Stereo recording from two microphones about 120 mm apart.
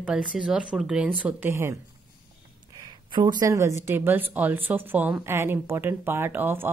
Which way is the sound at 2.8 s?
35° right (ahead or behind).